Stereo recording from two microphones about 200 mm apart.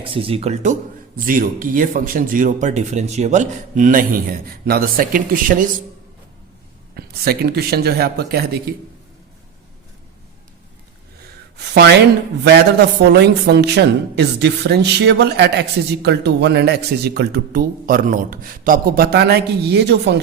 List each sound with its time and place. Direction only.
0.0 s speech: 25° right (ahead or behind); by 5.6 s 45° right (ahead or behind)
6.9 s speech: 50° right (ahead or behind)
11.5 s speech: 60° right (ahead or behind)